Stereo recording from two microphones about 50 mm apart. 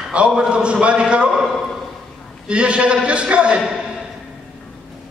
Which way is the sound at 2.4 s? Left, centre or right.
Right.